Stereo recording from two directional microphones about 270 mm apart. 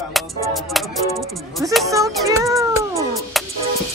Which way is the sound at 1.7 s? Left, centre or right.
Centre.